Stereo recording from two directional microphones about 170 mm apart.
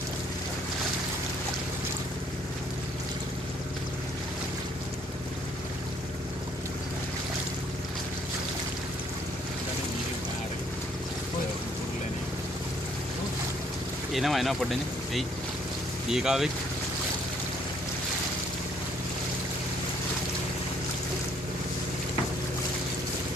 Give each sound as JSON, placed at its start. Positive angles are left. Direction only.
{"t": 14.1, "sound": "speech", "side_deg": 0}